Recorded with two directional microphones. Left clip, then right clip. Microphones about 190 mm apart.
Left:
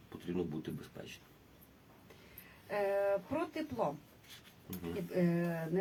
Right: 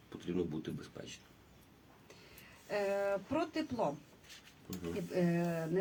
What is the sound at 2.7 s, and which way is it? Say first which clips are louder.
Speech: left 2 dB; 15° right (ahead or behind).